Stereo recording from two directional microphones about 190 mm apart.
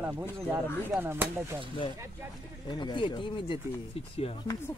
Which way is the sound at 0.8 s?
10° right (ahead or behind).